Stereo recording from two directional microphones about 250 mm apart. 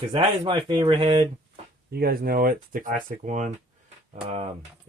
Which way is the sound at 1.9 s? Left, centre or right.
Right.